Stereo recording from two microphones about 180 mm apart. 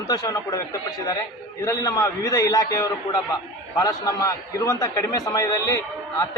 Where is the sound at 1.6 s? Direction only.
20° left (ahead or behind).